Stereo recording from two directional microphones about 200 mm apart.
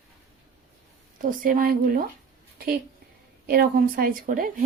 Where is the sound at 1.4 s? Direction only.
45° right (ahead or behind).